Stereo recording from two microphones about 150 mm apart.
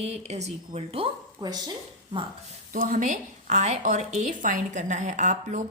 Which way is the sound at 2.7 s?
60° right (ahead or behind).